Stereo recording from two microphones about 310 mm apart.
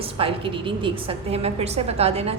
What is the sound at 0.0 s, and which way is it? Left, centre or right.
A woman's voice, centre.